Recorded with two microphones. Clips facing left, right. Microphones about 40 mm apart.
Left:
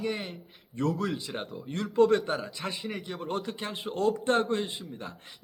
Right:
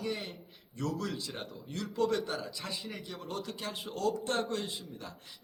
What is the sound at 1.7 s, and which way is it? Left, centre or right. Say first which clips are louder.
A man's voice: left 8 dB; left.